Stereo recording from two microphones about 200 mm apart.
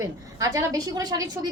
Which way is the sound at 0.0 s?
15° right (ahead or behind).